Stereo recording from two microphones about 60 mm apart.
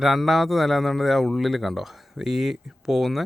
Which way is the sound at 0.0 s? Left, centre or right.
Centre.